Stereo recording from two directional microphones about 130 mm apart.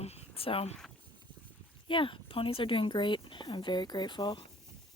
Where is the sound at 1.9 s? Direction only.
40° left (ahead or behind).